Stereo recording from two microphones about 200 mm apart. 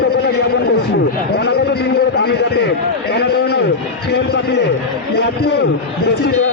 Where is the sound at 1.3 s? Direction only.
55° left (ahead or behind).